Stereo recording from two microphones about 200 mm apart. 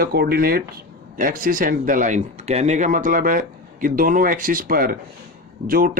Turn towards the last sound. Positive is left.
turn(degrees=-45)  # may be behind; listen again after turning